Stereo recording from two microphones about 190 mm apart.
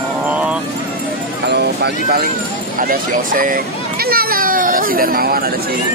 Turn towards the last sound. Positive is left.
turn(degrees=-55)  # may be behind; listen again after turning